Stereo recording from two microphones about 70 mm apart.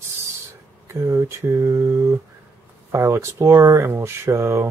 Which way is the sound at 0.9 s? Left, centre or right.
Right.